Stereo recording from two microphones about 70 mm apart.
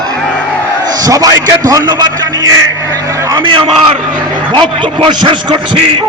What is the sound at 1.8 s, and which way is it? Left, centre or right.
Speech, right.